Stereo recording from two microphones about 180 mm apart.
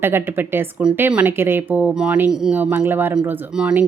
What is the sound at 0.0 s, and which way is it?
Speech, 10° right (ahead or behind).